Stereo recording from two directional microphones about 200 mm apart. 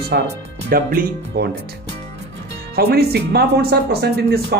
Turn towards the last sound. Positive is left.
turn(degrees=-55)  # may be behind; listen again after turning